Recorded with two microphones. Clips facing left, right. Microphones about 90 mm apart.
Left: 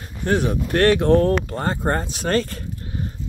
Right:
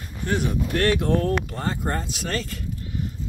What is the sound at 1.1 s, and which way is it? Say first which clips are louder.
Speech: left 6 dB; 40° left (ahead or behind).